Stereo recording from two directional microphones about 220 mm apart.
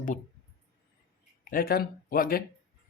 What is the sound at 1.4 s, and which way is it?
Speech, 40° left (ahead or behind).